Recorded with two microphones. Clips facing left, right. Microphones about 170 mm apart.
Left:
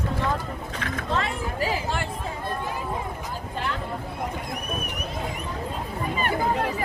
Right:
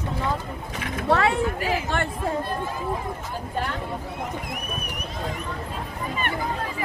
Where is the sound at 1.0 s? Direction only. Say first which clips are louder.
Right 8 dB; 70° right (ahead or behind).